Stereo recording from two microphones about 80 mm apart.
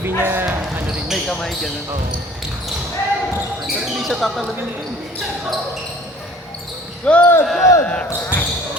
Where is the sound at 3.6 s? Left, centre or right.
Centre.